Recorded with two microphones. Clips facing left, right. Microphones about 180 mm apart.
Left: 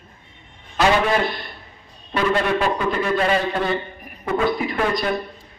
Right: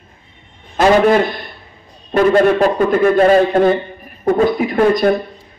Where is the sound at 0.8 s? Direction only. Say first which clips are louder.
Right 7 dB; 45° right (ahead or behind).